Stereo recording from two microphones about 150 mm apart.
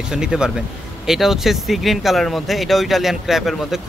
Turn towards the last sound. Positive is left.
turn(degrees=0)  # may be behind; listen again after turning